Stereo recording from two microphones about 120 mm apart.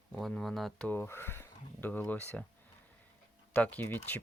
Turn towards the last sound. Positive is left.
turn(degrees=15)  # may be behind; listen again after turning